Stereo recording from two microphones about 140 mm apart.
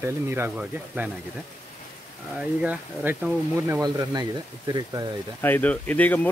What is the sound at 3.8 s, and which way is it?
Speech, 30° right (ahead or behind).